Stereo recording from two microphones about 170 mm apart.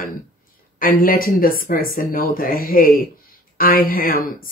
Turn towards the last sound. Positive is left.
turn(degrees=55)  # may be behind; listen again after turning